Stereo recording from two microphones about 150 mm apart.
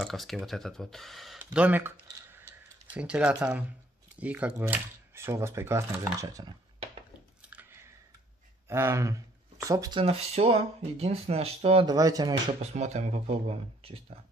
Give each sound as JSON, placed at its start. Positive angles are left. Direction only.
{"t": 0.0, "sound": "speech", "side_deg": 0}
{"t": 3.0, "sound": "speech", "side_deg": -10}
{"t": 8.6, "sound": "speech", "side_deg": -15}
{"t": 10.0, "sound": "speech", "side_deg": -40}
{"t": 11.8, "sound": "speech", "side_deg": -25}
{"t": 12.7, "sound": "speech", "side_deg": -50}